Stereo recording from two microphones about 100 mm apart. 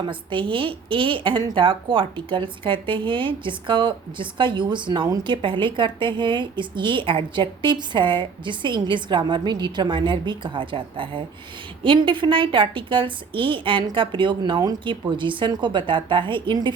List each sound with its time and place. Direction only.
0.0 s a woman's voice: 55° right (ahead or behind)